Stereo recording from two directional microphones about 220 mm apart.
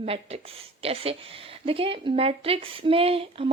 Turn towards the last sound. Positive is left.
turn(degrees=-25)  # may be behind; listen again after turning